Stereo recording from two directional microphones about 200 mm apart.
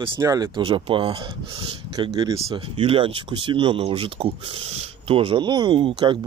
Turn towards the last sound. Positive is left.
turn(degrees=-25)  # may be behind; listen again after turning